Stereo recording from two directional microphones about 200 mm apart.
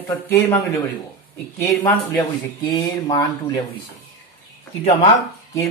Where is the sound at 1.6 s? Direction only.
10° left (ahead or behind).